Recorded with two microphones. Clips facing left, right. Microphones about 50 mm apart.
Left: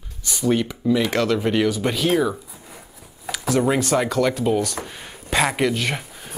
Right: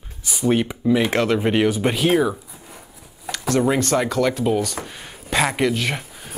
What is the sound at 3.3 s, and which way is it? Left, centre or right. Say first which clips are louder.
Speech: right 1 dB; centre.